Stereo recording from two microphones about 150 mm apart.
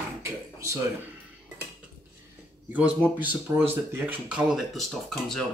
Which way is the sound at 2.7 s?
10° right (ahead or behind).